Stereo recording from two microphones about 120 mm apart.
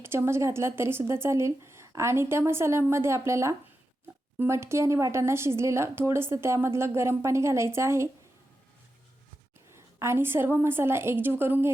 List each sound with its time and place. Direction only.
0.0 s speech: 20° right (ahead or behind)
9.7 s speech: 20° right (ahead or behind)